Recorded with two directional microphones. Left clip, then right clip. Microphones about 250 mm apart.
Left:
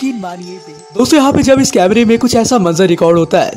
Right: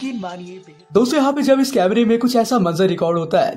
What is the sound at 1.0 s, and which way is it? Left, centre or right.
A man's voice, left.